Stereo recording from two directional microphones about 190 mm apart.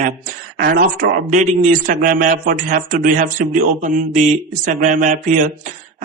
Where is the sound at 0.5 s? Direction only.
50° right (ahead or behind).